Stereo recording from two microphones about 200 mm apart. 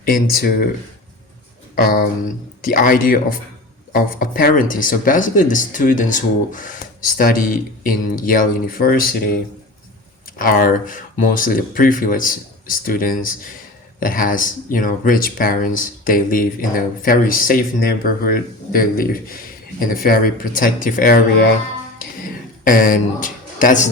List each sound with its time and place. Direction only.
0.0 s speech: 45° left (ahead or behind)
1.7 s speech: 45° left (ahead or behind)
22.6 s a man's voice: 40° left (ahead or behind)